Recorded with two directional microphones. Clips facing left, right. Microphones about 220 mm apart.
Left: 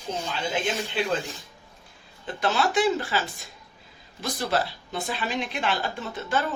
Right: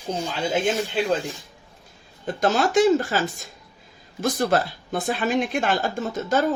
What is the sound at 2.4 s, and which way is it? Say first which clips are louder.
Speech: right 5 dB; 45° right (ahead or behind).